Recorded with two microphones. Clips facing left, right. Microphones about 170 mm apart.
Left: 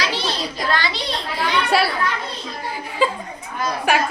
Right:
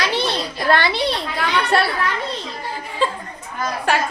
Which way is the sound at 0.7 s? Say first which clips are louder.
Right 7 dB; 60° right (ahead or behind).